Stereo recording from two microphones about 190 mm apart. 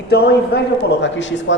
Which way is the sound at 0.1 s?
60° left (ahead or behind).